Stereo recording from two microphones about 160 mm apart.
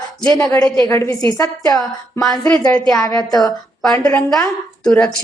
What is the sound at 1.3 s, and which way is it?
Speech, 20° left (ahead or behind).